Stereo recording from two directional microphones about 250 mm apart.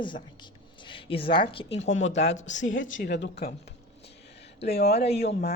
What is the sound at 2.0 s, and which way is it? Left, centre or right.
Speech, left.